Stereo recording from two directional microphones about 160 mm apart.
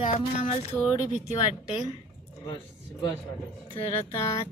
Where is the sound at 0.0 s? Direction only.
45° left (ahead or behind).